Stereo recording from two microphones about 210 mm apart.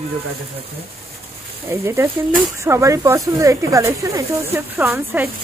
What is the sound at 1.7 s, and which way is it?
A woman's voice, 10° right (ahead or behind).